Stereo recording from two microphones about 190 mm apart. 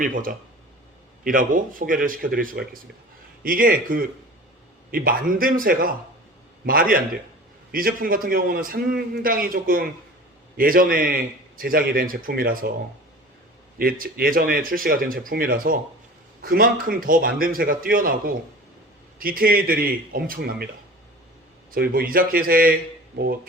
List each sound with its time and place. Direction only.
0.0 s a man's voice: 45° right (ahead or behind)
13.7 s a man's voice: 50° right (ahead or behind)
21.7 s a man's voice: 50° right (ahead or behind)